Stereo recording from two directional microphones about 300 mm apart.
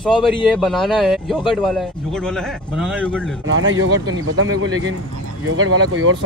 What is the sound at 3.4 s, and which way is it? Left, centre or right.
Speech, right.